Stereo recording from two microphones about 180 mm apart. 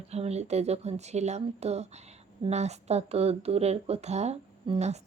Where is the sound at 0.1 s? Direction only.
35° right (ahead or behind).